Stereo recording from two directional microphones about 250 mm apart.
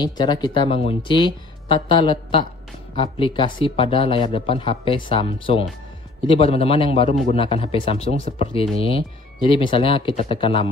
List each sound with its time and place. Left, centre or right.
0.0 s speech: centre